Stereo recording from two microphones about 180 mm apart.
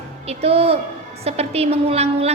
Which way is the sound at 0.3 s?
35° right (ahead or behind).